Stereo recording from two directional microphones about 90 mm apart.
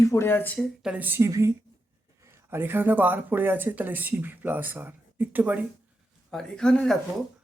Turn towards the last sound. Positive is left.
turn(degrees=5)  # may be behind; listen again after turning